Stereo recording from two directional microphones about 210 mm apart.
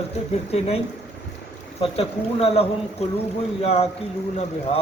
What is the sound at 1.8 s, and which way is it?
A man's voice, 25° left (ahead or behind).